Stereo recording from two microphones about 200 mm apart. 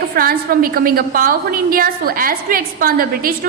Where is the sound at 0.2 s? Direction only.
50° right (ahead or behind).